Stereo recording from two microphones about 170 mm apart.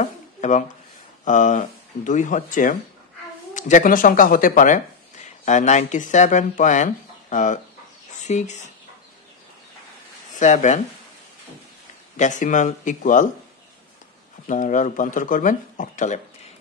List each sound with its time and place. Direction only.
0.0 s a sound: 45° left (ahead or behind)
1.2 s speech: 50° left (ahead or behind)
10.4 s speech: 45° left (ahead or behind)
12.2 s speech: 45° left (ahead or behind)
14.5 s speech: 50° left (ahead or behind)